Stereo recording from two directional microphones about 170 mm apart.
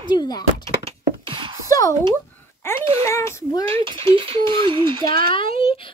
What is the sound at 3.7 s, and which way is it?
Speech, 30° right (ahead or behind).